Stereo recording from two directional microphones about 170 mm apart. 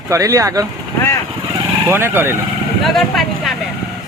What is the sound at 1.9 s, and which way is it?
Speech, 15° right (ahead or behind).